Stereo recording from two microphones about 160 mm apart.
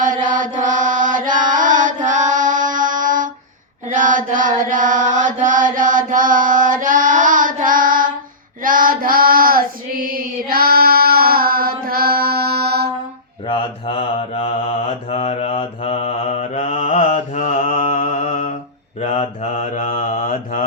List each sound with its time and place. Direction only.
0.0 s mantra: 55° right (ahead or behind)
3.8 s chant: 55° right (ahead or behind)
8.6 s female singing: 60° right (ahead or behind); by 12.9 s 85° right
13.5 s mantra: 35° left (ahead or behind); by 20.7 s 55° left (ahead or behind)